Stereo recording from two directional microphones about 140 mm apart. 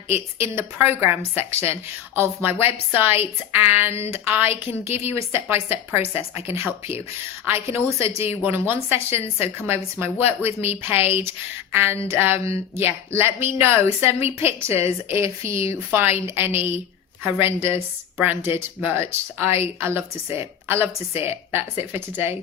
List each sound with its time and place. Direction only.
0.1 s a woman's voice: 15° right (ahead or behind)
7.4 s a woman's voice: 20° right (ahead or behind)